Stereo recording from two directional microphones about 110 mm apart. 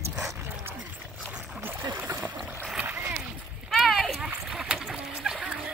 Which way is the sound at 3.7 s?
Centre (ahead or behind).